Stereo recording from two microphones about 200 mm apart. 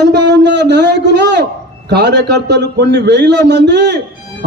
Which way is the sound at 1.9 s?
55° right (ahead or behind).